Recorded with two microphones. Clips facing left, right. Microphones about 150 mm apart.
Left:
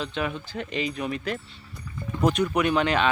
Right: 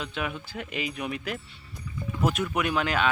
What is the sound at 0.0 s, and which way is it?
Speech, 5° right (ahead or behind).